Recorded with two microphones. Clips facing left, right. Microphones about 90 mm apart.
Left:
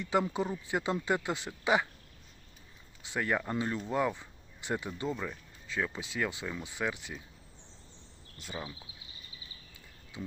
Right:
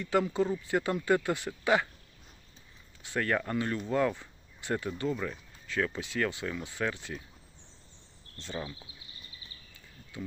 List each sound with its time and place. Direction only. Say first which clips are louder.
0.0 s speech: right 2 dB; 20° left (ahead or behind)
3.0 s speech: right 2 dB; 15° left (ahead or behind)
5.1 s speech: right 3 dB; centre (ahead or behind)
5.6 s speech: right 3 dB; 20° left (ahead or behind)
8.4 s speech: right 3 dB; 10° left (ahead or behind)
9.7 s a sound: right 2 dB; 20° left (ahead or behind)